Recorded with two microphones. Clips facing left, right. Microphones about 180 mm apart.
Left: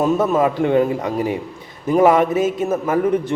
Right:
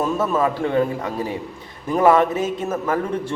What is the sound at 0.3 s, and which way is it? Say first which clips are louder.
A man's voice: left 1 dB; 15° left (ahead or behind).